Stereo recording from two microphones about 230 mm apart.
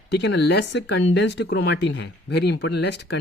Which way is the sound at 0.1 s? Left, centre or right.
Left.